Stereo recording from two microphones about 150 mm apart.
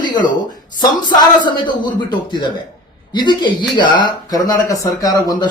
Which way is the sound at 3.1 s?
30° left (ahead or behind).